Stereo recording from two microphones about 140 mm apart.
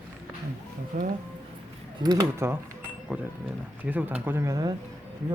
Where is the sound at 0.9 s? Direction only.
50° right (ahead or behind).